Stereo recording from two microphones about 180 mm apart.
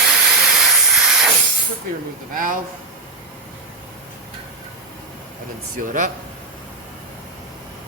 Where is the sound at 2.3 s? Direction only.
50° right (ahead or behind).